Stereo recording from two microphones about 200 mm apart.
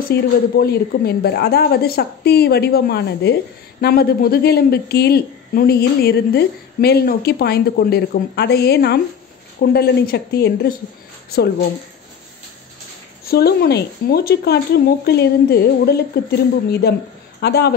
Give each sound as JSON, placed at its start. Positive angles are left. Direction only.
{"t": 0.1, "sound": "a woman's voice", "side_deg": 50}
{"t": 13.2, "sound": "a woman's voice", "side_deg": 50}
{"t": 17.4, "sound": "a man's voice", "side_deg": 55}